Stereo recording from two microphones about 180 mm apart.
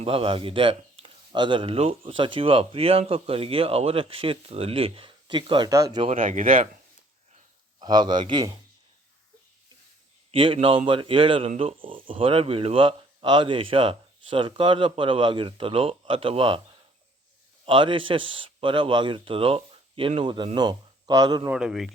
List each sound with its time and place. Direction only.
0.0 s speech: 30° right (ahead or behind)
6.1 s speech: 45° right (ahead or behind)
7.8 s speech: 25° right (ahead or behind)
10.3 s speech: 30° right (ahead or behind)
17.7 s speech: 30° right (ahead or behind)
21.5 s a man's voice: 5° right (ahead or behind)